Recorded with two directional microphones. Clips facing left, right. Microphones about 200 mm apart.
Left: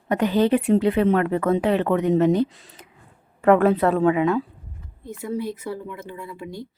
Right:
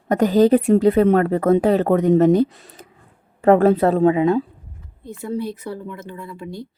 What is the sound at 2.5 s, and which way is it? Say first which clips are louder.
Speech: right 5 dB; 60° right (ahead or behind).